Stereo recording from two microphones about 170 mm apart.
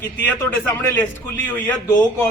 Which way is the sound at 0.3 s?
15° left (ahead or behind).